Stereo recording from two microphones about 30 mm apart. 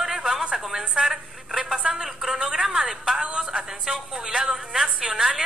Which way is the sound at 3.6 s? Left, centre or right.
Centre.